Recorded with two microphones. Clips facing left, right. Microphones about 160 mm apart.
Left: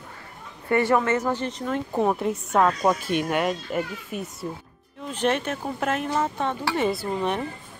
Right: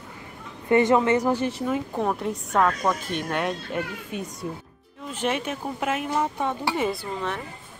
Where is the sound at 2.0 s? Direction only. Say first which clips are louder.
Left 3 dB; 5° left (ahead or behind).